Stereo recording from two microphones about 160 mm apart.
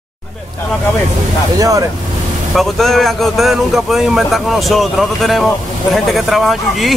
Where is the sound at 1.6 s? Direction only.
20° right (ahead or behind).